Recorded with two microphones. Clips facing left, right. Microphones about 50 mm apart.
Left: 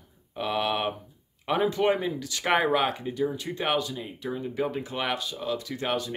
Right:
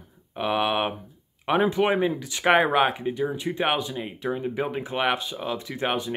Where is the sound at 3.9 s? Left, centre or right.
Right.